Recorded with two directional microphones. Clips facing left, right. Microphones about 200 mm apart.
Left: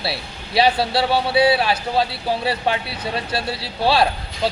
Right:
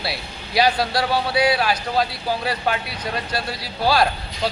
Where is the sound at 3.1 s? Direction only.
30° left (ahead or behind).